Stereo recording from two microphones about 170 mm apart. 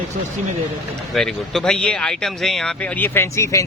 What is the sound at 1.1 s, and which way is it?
Speech, centre (ahead or behind).